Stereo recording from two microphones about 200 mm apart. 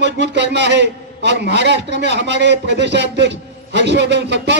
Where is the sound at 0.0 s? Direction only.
60° right (ahead or behind).